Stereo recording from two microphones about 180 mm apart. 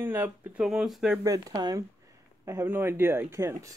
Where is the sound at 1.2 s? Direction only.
20° right (ahead or behind).